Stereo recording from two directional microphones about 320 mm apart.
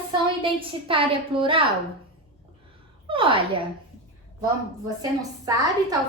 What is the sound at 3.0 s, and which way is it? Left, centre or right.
Speech, centre.